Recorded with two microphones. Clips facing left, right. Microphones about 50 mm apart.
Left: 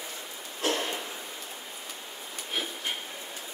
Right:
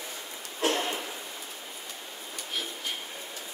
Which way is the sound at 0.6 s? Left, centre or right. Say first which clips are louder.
Right 2 dB; right.